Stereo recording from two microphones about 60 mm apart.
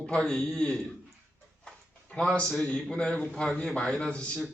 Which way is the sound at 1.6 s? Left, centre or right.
Centre.